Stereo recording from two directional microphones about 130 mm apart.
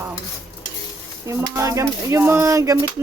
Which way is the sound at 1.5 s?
25° right (ahead or behind).